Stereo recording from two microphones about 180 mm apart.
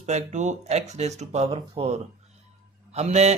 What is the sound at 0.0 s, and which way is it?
A man's voice, 40° right (ahead or behind).